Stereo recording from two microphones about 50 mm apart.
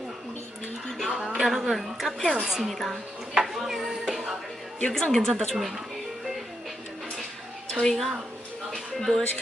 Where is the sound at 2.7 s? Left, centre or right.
Centre.